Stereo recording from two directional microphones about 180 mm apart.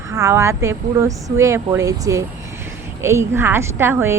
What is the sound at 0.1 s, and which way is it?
A woman's voice, 15° right (ahead or behind).